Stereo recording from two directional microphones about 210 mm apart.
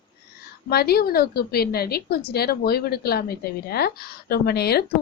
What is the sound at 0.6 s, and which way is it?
A woman's voice, 50° left (ahead or behind).